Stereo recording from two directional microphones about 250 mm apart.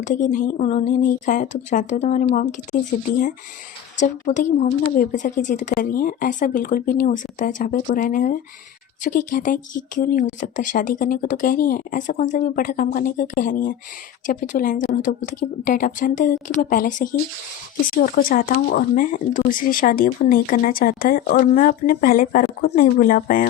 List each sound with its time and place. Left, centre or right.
0.0 s a woman's voice: left
3.9 s a woman's voice: left